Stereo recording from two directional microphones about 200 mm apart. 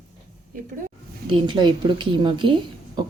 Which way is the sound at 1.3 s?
25° right (ahead or behind).